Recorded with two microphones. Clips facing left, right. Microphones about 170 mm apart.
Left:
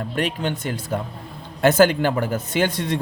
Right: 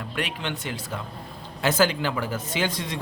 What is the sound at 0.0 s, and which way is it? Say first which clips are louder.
Speech: left 7 dB; 45° left (ahead or behind).